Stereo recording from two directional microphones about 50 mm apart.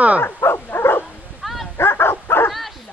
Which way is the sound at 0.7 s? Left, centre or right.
Left.